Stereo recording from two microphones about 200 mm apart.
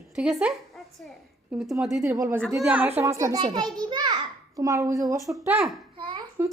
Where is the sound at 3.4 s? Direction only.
25° right (ahead or behind); by 5.8 s 5° right (ahead or behind).